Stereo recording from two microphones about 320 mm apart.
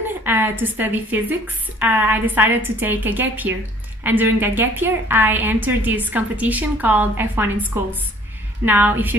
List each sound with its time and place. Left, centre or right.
0.2 s a woman's voice: centre